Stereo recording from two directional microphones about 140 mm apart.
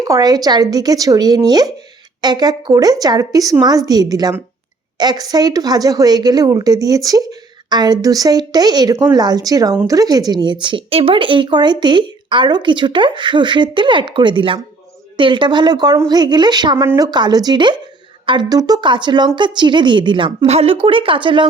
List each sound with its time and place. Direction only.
0.0 s a woman's voice: 25° right (ahead or behind)
16.7 s a woman's voice: 20° right (ahead or behind)
17.1 s speech: 30° right (ahead or behind)